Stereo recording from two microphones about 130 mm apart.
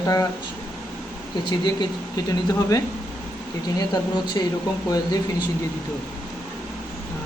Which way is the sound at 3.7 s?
35° left (ahead or behind).